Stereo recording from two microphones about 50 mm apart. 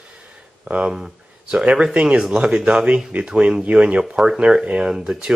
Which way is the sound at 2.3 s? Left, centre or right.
Centre.